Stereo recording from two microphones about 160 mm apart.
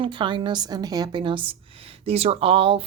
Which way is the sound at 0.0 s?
30° right (ahead or behind).